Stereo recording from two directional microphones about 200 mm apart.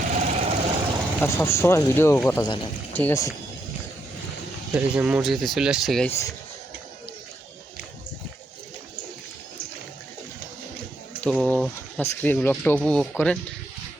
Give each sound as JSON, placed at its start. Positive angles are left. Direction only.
{"t": 0.0, "sound": "vehicle", "side_deg": -40}
{"t": 1.2, "sound": "speech", "side_deg": 10}
{"t": 4.7, "sound": "speech", "side_deg": -5}
{"t": 6.1, "sound": "speech", "side_deg": 15}
{"t": 11.2, "sound": "speech", "side_deg": 5}